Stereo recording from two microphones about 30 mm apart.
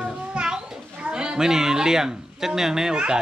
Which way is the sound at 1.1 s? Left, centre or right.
Right.